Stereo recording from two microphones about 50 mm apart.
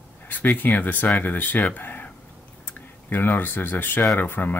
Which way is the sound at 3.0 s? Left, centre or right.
Left.